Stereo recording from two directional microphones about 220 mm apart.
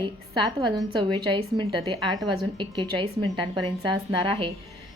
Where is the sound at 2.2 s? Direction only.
20° right (ahead or behind).